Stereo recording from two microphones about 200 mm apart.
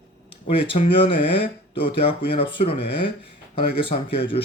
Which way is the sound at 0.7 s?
25° left (ahead or behind).